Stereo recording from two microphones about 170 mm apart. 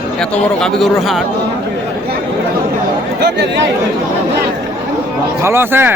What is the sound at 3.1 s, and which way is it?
Speech, 90° right.